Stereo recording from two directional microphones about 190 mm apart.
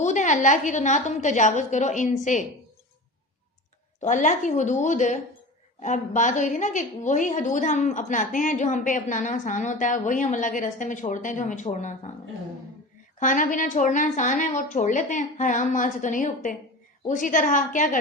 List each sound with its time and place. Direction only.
0.0 s a woman's voice: 40° left (ahead or behind)
4.0 s a woman's voice: 40° left (ahead or behind)
13.1 s a woman's voice: 45° left (ahead or behind)